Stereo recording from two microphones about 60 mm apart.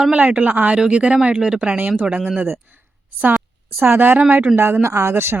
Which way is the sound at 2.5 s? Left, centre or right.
Right.